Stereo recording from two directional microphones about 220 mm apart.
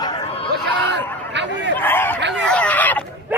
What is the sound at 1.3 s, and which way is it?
Honk, 55° right (ahead or behind).